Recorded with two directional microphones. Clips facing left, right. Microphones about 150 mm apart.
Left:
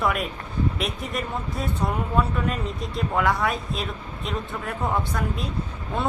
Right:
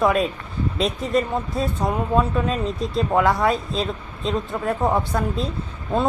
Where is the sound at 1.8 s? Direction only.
20° right (ahead or behind).